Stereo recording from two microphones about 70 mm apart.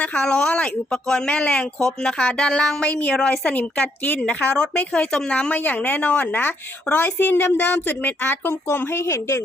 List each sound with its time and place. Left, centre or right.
0.0 s a woman's voice: centre; by 9.4 s left